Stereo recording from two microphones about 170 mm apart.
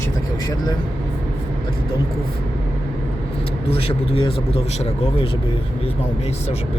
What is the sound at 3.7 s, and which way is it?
Speech, 35° left (ahead or behind).